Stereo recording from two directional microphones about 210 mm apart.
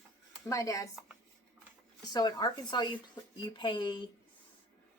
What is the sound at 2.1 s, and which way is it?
Speech, 20° left (ahead or behind).